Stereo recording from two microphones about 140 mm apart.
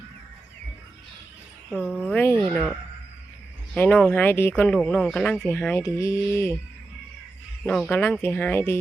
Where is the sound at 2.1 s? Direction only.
15° left (ahead or behind).